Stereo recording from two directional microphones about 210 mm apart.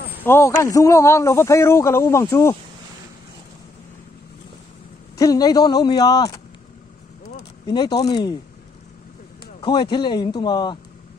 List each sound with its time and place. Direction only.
0.2 s a man's voice: 10° left (ahead or behind)
5.1 s a man's voice: 20° left (ahead or behind)
7.6 s a man's voice: 20° left (ahead or behind)
9.6 s a man's voice: 20° left (ahead or behind)